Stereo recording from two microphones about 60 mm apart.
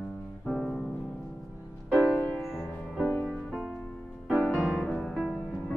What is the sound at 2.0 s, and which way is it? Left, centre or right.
Music, centre.